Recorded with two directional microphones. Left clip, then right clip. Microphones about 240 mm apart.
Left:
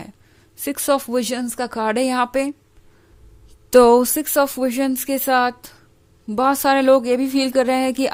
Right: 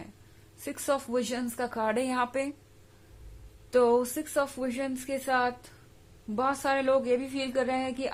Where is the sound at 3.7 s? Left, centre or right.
Left.